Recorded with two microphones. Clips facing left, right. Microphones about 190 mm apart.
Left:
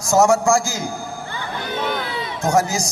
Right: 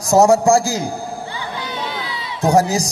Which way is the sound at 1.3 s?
50° left (ahead or behind).